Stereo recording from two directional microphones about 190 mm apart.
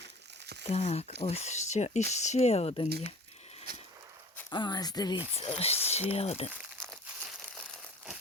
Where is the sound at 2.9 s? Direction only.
55° right (ahead or behind).